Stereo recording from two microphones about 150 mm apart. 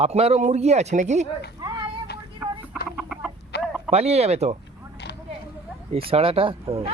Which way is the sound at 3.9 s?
45° right (ahead or behind).